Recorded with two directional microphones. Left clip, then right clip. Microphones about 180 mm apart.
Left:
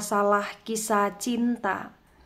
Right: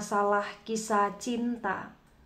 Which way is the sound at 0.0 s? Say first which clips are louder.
Left 4 dB; 30° left (ahead or behind).